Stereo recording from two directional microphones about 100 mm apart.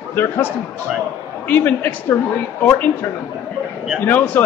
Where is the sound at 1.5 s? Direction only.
20° left (ahead or behind).